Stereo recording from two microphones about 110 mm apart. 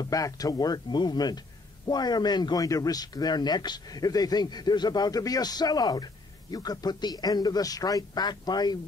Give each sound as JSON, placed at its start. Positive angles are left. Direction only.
{"t": 0.0, "sound": "a man's voice", "side_deg": 35}